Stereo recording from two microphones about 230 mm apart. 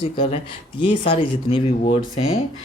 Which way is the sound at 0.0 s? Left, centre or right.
Left.